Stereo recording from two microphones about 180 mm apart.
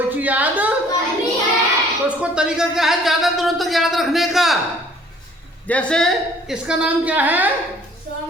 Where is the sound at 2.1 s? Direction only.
5° right (ahead or behind).